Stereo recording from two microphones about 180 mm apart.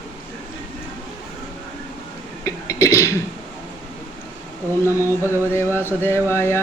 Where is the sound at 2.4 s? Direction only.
15° left (ahead or behind).